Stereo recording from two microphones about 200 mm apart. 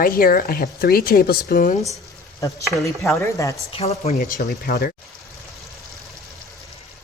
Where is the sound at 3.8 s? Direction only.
30° left (ahead or behind); by 4.9 s 50° left (ahead or behind).